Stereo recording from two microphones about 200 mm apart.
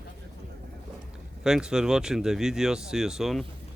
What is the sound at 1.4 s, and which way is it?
Speech, 5° right (ahead or behind).